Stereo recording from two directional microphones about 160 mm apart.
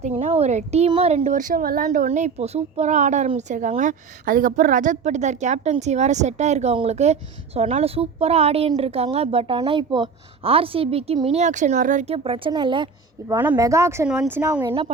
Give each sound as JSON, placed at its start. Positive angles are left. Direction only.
{"t": 0.2, "sound": "a woman's voice", "side_deg": -40}
{"t": 12.1, "sound": "a woman's voice", "side_deg": -35}
{"t": 13.2, "sound": "speech", "side_deg": -15}
{"t": 14.9, "sound": "a woman's voice", "side_deg": -35}